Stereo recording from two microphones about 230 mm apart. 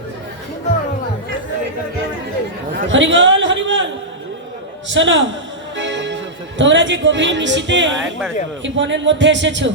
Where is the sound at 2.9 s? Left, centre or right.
Right.